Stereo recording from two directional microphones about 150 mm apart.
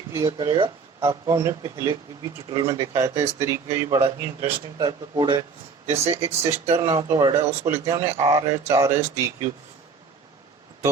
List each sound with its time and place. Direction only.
0.1 s speech: 20° right (ahead or behind)
0.3 s speech: 30° right (ahead or behind)
3.8 s speech: 30° right (ahead or behind)